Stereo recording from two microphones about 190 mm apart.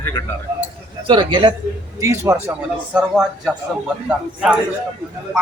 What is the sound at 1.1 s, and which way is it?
Speech, 25° right (ahead or behind).